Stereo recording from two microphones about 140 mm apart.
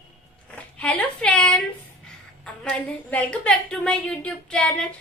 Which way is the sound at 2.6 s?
10° left (ahead or behind).